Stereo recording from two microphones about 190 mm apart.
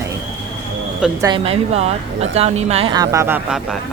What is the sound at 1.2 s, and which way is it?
Speech, 25° right (ahead or behind).